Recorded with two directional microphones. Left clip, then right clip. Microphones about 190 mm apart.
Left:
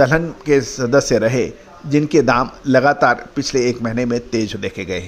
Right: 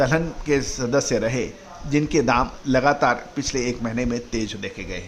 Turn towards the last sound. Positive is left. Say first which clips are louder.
# left 8 dB
turn(degrees=35)  # may be behind; listen again after turning